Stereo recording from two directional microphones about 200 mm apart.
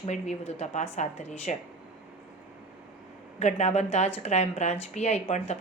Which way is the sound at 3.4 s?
35° left (ahead or behind).